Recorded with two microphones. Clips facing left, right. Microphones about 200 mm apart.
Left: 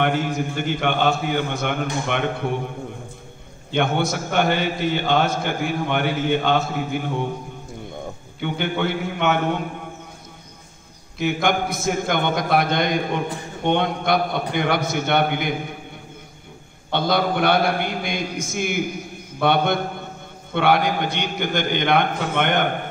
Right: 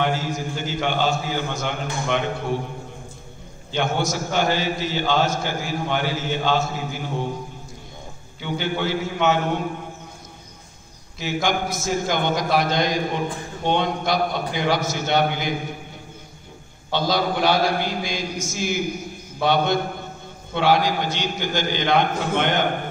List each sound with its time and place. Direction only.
0.0 s a man's voice: 60° left (ahead or behind)
3.7 s a man's voice: 60° left (ahead or behind)
8.4 s a man's voice: 60° left (ahead or behind)
11.4 s a man's voice: 55° left (ahead or behind)
16.9 s a man's voice: 55° left (ahead or behind)